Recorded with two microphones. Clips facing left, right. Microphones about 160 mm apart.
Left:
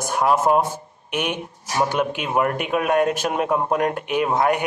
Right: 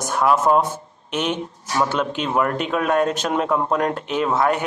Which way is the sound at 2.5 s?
55° left (ahead or behind).